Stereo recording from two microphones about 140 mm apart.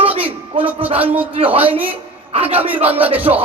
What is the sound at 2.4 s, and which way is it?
Speech, 10° right (ahead or behind).